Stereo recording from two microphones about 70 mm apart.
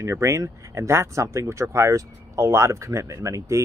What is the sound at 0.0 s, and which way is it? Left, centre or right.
Speech, right.